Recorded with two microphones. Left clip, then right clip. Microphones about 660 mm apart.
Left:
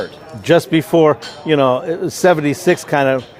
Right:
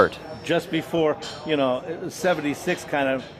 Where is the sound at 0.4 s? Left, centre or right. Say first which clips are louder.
Left 11 dB; left.